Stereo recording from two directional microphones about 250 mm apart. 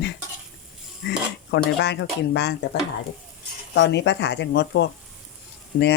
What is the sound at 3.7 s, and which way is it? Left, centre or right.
Speech, left.